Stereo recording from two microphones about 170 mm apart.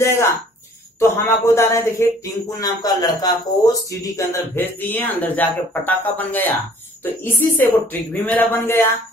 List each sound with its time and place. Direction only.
0.0 s speech: 15° left (ahead or behind)